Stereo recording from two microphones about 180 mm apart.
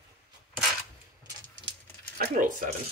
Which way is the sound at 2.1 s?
45° right (ahead or behind).